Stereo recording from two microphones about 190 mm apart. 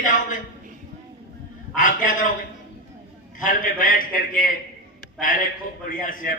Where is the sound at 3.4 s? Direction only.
45° left (ahead or behind).